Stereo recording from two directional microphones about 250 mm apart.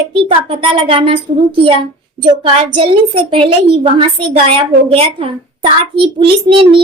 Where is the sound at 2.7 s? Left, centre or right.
Right.